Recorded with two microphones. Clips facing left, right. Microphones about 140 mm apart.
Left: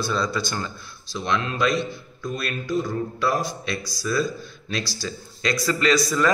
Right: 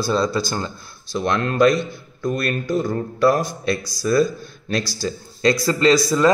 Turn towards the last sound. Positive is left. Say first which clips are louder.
# right 5 dB
turn(degrees=-25)  # may be behind; listen again after turning